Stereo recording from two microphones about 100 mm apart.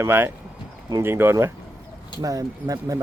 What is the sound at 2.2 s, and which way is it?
Speech, 35° right (ahead or behind).